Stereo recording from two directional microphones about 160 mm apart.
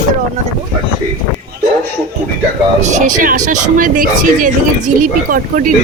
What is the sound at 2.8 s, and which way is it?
Speech, 50° right (ahead or behind).